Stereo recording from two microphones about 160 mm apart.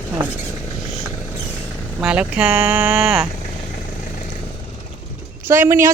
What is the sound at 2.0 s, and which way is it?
Speech, 5° right (ahead or behind).